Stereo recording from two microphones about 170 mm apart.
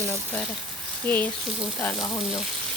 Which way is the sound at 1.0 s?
10° left (ahead or behind).